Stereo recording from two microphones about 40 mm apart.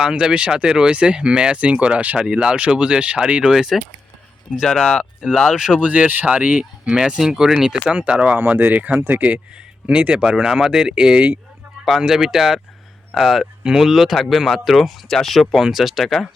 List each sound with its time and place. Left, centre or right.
0.0 s speech: centre; by 2.1 s right
2.1 s speech: centre
3.5 s speech: centre
5.3 s speech: centre
5.8 s speech: right
6.9 s speech: right
7.9 s speech: right
8.5 s speech: right
9.8 s speech: right
10.4 s speech: centre
11.9 s speech: centre
13.7 s speech: centre